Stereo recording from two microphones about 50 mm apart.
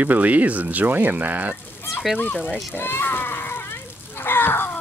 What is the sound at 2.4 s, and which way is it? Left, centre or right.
A child's voice, left.